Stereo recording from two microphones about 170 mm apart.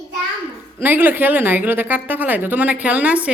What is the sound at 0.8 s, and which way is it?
Speech, 10° right (ahead or behind).